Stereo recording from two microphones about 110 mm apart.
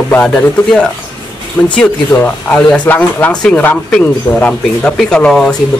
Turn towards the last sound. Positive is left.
turn(degrees=5)  # may be behind; listen again after turning